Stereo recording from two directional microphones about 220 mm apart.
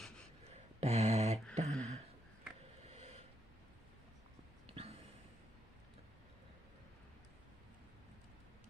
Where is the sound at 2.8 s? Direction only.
30° right (ahead or behind).